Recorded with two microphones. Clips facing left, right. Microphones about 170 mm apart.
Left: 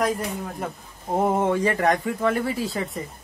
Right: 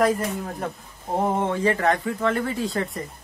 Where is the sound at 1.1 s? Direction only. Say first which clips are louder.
Left 2 dB; 10° left (ahead or behind).